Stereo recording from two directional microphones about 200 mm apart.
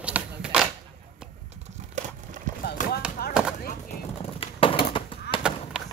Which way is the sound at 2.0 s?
35° right (ahead or behind).